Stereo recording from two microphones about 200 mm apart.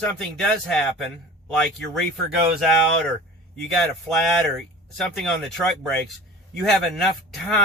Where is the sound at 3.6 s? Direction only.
Centre (ahead or behind).